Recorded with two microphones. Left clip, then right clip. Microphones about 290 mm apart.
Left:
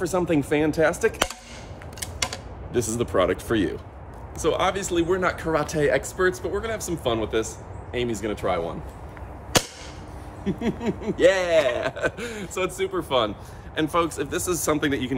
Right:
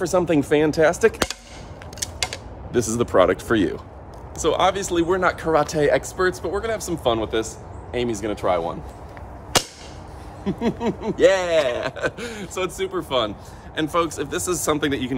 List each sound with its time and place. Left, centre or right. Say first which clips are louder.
0.0 s speech: right 4 dB; right
2.7 s speech: right 4 dB; right
10.4 s speech: right 4 dB; centre